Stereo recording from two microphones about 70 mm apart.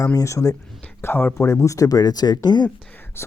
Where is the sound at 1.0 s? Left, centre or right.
Left.